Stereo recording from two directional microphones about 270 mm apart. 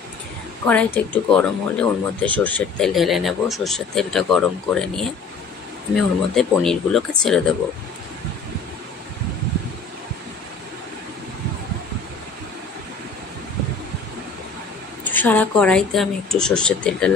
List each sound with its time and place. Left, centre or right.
0.7 s speech: centre
15.0 s speech: centre